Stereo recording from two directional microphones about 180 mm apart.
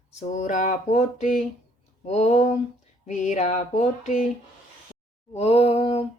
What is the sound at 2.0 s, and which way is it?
Speech, 35° left (ahead or behind).